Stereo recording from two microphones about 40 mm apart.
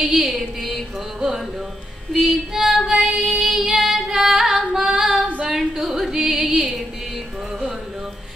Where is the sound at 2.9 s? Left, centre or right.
Centre.